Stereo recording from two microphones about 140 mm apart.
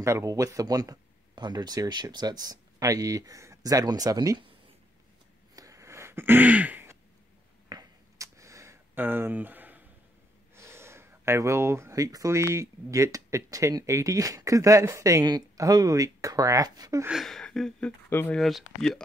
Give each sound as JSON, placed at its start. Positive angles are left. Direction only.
{"t": 0.0, "sound": "speech", "side_deg": -20}
{"t": 5.6, "sound": "throat clearing", "side_deg": -20}
{"t": 7.7, "sound": "a sound", "side_deg": -20}
{"t": 10.5, "sound": "speech", "side_deg": -20}
{"t": 17.1, "sound": "speech", "side_deg": 0}